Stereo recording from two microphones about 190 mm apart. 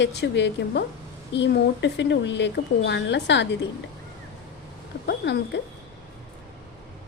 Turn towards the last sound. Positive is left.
turn(degrees=65)  # may be behind; listen again after turning